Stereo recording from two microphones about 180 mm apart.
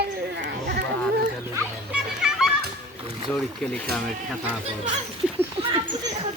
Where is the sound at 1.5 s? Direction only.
15° right (ahead or behind).